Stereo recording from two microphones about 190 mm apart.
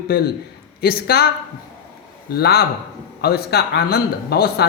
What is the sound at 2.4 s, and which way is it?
Speech, 55° left (ahead or behind).